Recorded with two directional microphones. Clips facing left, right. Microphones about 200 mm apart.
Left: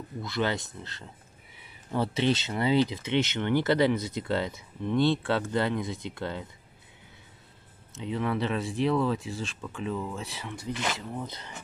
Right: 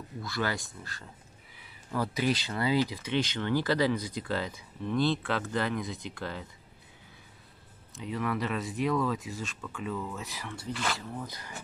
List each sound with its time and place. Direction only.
0.2 s speech: 20° left (ahead or behind)
7.9 s speech: 25° left (ahead or behind)